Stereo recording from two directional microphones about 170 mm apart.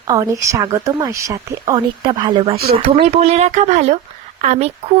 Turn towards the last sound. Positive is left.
turn(degrees=-40)  # may be behind; listen again after turning